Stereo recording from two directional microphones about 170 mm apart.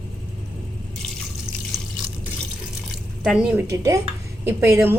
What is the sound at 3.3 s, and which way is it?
Speech, 5° right (ahead or behind).